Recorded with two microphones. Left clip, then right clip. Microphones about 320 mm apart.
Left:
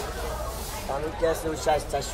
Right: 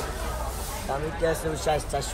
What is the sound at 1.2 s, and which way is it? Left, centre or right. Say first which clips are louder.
Speech: left 1 dB; left.